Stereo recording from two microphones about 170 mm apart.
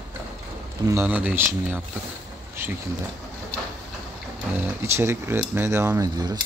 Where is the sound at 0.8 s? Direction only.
10° right (ahead or behind).